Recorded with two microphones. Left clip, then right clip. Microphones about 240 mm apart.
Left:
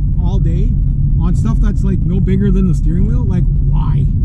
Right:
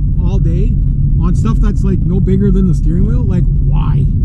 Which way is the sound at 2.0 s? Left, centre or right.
Right.